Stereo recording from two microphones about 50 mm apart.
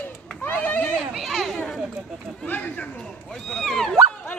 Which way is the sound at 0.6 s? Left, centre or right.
Left.